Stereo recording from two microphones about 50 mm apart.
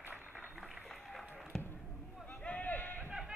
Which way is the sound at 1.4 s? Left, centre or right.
Centre.